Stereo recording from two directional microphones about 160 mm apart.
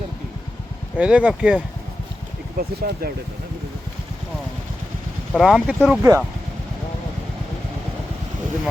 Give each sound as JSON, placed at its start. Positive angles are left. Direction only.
{"t": 0.9, "sound": "speech", "side_deg": -10}
{"t": 2.6, "sound": "speech", "side_deg": -70}
{"t": 5.3, "sound": "speech", "side_deg": 0}
{"t": 6.0, "sound": "speech", "side_deg": -20}